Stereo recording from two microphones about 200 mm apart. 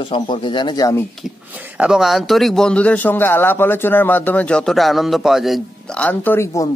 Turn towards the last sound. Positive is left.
turn(degrees=10)  # may be behind; listen again after turning